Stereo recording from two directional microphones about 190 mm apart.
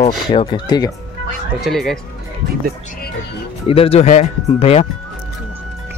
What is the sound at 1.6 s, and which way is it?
Speech, centre (ahead or behind).